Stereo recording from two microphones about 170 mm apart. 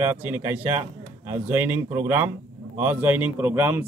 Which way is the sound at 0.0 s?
10° right (ahead or behind).